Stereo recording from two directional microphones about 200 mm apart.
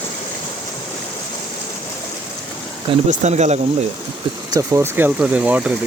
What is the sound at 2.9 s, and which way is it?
Speech, 35° right (ahead or behind).